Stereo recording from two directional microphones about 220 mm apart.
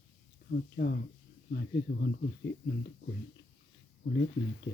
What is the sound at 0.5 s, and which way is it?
Speech, 50° left (ahead or behind).